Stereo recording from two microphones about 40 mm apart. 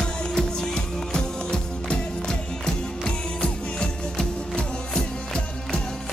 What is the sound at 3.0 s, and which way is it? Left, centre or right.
Music, left.